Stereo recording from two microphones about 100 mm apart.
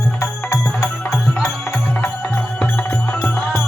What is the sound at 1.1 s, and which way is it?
Music, 5° left (ahead or behind).